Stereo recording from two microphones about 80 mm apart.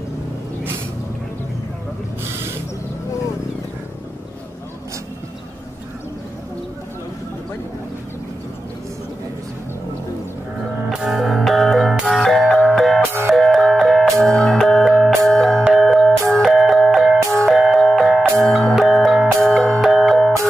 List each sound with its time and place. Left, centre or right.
11.1 s music: centre